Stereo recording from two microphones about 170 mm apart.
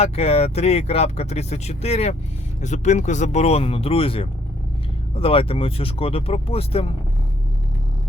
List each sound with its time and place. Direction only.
0.0 s speech: 35° left (ahead or behind)